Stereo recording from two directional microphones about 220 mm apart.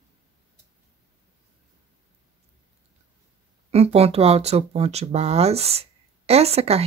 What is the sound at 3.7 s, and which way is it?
Speech, 30° right (ahead or behind).